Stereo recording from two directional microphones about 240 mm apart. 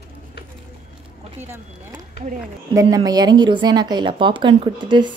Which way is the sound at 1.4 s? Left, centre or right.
Centre.